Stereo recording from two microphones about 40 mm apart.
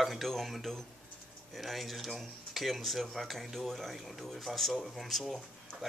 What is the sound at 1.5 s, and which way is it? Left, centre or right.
Speech, centre.